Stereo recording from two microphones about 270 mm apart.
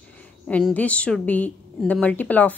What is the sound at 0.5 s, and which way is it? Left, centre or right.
A woman's voice, centre.